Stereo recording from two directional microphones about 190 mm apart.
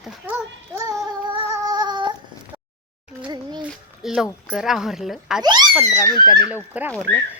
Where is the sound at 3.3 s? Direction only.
25° right (ahead or behind).